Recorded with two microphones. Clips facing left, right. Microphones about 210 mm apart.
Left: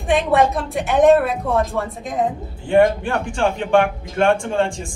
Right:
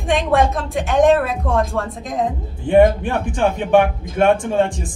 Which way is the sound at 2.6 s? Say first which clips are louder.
Right 2 dB; 20° right (ahead or behind).